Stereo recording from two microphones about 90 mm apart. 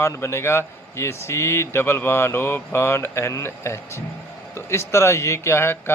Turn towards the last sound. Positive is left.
turn(degrees=25)  # may be behind; listen again after turning